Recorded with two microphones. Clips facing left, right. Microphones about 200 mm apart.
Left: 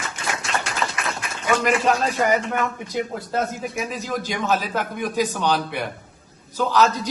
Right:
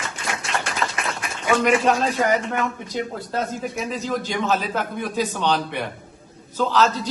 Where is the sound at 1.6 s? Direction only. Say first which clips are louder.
Right 2 dB; centre (ahead or behind).